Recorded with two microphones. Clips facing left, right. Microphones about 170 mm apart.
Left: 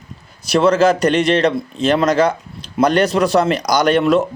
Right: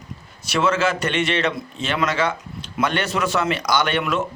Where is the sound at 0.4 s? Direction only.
35° left (ahead or behind).